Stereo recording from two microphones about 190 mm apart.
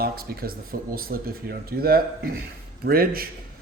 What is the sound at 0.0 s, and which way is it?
A man's voice, 50° right (ahead or behind).